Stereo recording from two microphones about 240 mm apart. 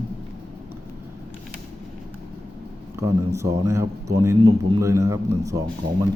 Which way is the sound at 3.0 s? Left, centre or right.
Centre.